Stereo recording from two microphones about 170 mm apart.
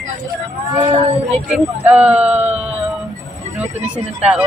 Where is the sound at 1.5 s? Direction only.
5° right (ahead or behind).